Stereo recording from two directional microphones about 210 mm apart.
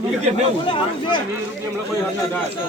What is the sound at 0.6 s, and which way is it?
Speech, 25° left (ahead or behind).